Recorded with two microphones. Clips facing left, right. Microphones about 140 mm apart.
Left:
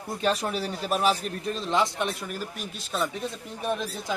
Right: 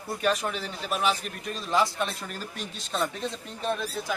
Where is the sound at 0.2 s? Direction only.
30° left (ahead or behind).